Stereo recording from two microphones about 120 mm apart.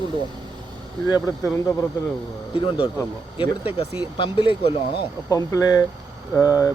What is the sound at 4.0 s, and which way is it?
Speech, 45° left (ahead or behind).